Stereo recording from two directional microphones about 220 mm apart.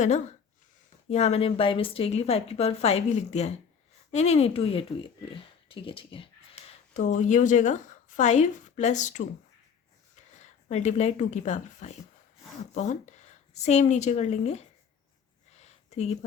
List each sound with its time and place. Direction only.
1.1 s a woman's voice: 30° left (ahead or behind)
10.4 s a woman's voice: 30° left (ahead or behind)
15.5 s a sound: 30° left (ahead or behind)